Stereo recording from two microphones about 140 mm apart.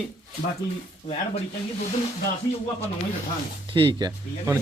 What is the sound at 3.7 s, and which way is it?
Speech, 40° right (ahead or behind).